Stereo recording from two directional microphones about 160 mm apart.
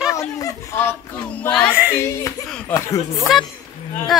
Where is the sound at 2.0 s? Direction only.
20° left (ahead or behind).